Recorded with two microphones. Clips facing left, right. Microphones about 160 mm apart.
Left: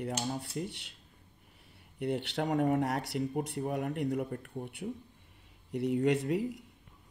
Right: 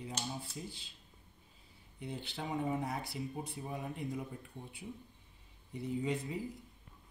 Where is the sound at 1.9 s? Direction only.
75° left (ahead or behind).